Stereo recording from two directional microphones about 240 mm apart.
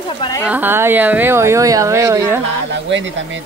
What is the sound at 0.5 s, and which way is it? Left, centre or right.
Speech, centre.